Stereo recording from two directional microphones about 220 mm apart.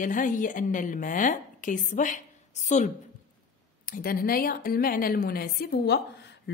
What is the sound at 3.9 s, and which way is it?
A woman's voice, 45° left (ahead or behind).